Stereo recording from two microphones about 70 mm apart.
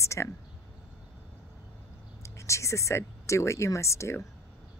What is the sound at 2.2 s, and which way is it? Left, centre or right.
A woman's voice, left.